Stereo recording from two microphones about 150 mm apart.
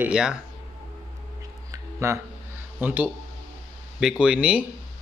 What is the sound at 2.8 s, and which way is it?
Speech, 10° right (ahead or behind).